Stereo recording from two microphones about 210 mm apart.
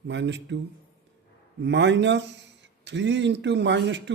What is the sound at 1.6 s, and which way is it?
A man's voice, 60° right (ahead or behind).